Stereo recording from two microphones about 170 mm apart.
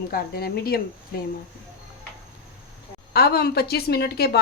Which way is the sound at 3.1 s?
65° left (ahead or behind).